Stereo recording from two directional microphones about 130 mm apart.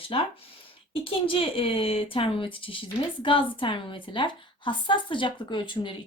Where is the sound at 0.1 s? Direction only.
45° left (ahead or behind).